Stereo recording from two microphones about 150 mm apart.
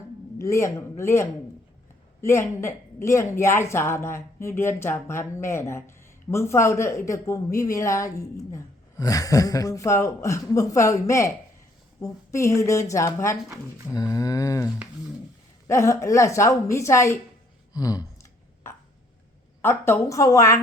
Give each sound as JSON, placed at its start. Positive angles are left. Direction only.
{"t": 0.3, "sound": "speech", "side_deg": 20}
{"t": 17.7, "sound": "a sound", "side_deg": 25}
{"t": 19.6, "sound": "speech", "side_deg": 15}